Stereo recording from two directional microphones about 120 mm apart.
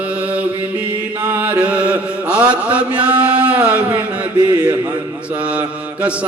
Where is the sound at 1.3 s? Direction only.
10° right (ahead or behind).